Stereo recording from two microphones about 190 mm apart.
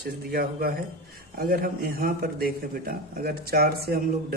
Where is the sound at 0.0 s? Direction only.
55° right (ahead or behind).